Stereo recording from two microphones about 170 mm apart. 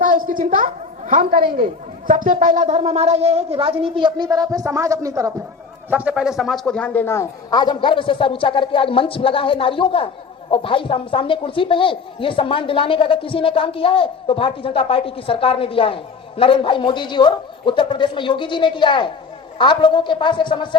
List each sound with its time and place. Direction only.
0.0 s a sound: 50° right (ahead or behind)
1.5 s speech: 50° right (ahead or behind); by 5.3 s 20° right (ahead or behind)
5.9 s a man's voice: 10° right (ahead or behind); by 20.7 s 30° left (ahead or behind)